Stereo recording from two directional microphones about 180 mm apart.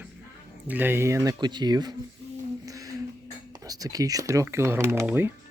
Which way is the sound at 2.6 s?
20° right (ahead or behind).